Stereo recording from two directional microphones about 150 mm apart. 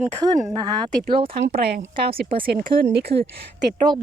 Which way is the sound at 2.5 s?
90° right.